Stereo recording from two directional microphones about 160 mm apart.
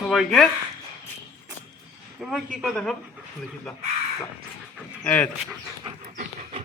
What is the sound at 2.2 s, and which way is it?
Speech, centre (ahead or behind).